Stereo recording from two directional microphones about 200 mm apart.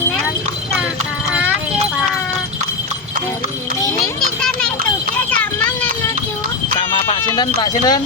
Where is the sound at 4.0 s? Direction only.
Centre (ahead or behind).